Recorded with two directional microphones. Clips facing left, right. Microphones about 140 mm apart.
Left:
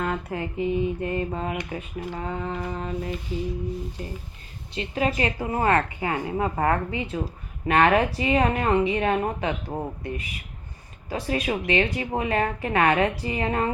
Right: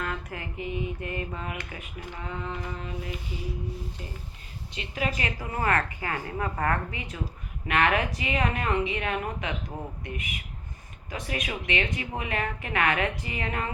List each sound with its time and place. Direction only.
0.0 s a woman's voice: 25° left (ahead or behind); by 2.9 s 40° left (ahead or behind)
4.7 s a woman's voice: 35° left (ahead or behind)